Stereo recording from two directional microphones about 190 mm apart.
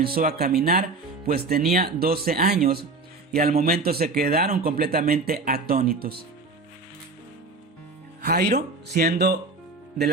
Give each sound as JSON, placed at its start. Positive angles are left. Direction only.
{"t": 0.0, "sound": "speech", "side_deg": -50}
{"t": 8.2, "sound": "speech", "side_deg": -55}